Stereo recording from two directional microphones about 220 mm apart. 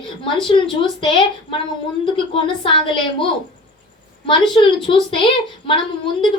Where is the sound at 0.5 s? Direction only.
25° left (ahead or behind).